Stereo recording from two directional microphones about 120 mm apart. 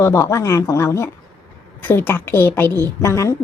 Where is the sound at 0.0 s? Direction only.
25° left (ahead or behind).